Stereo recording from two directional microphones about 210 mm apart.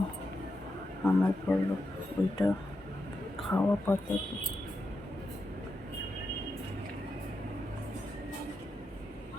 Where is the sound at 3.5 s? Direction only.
10° left (ahead or behind).